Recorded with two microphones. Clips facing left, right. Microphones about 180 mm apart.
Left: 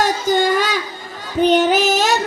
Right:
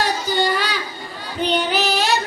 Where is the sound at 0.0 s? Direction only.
45° left (ahead or behind).